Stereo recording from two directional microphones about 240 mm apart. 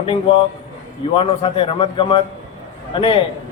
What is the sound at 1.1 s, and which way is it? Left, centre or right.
A man's voice, left.